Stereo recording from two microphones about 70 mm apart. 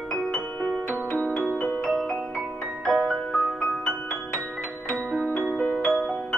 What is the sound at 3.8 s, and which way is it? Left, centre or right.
Music, left.